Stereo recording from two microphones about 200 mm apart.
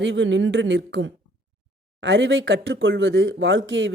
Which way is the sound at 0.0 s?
65° right (ahead or behind).